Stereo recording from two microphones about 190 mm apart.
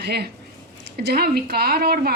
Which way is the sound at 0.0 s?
60° right (ahead or behind).